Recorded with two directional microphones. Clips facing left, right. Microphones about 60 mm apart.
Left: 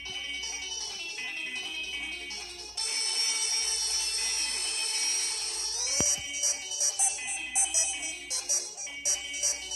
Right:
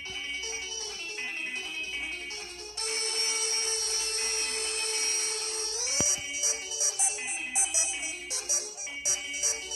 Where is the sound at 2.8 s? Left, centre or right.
Right.